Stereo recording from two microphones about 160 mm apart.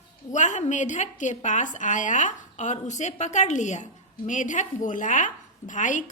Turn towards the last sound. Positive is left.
turn(degrees=55)  # may be behind; listen again after turning